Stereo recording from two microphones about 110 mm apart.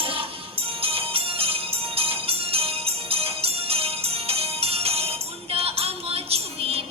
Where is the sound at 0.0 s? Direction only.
55° right (ahead or behind).